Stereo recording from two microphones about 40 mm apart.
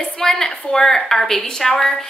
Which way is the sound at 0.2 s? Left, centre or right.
Centre.